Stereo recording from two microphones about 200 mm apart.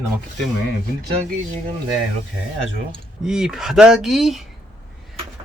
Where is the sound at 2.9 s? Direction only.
5° right (ahead or behind).